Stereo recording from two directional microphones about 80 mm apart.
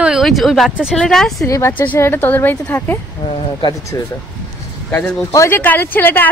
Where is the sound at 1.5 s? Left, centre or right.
Left.